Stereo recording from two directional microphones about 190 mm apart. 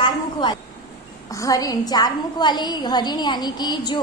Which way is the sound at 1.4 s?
20° left (ahead or behind).